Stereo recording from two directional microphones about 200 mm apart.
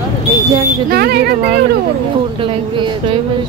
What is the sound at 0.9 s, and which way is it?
Speech, 50° right (ahead or behind).